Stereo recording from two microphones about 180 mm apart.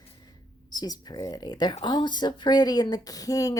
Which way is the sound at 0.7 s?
20° left (ahead or behind).